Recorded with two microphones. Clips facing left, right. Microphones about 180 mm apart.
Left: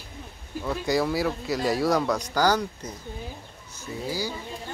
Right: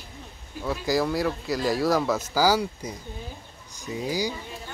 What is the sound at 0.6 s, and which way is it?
Speech, centre (ahead or behind).